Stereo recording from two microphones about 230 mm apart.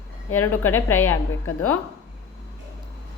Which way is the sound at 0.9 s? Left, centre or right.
Left.